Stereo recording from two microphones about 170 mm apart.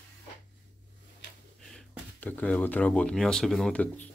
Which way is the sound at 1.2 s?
90° left.